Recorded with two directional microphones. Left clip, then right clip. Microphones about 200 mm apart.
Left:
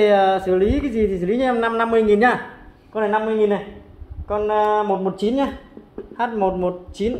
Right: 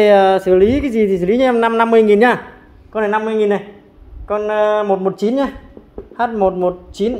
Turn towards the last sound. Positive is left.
turn(degrees=-55)  # may be behind; listen again after turning